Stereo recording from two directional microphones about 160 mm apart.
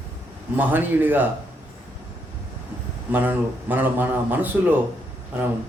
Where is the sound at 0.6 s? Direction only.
10° right (ahead or behind).